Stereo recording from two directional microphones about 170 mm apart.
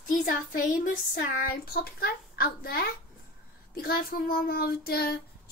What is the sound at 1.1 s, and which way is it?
A child's voice, 55° left (ahead or behind).